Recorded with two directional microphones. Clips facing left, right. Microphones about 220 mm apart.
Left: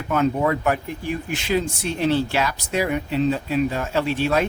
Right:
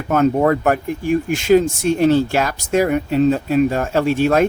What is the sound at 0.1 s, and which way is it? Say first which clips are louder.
Speech: right 6 dB; 45° right (ahead or behind).